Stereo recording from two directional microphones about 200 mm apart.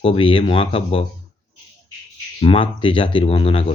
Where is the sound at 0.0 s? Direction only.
30° left (ahead or behind).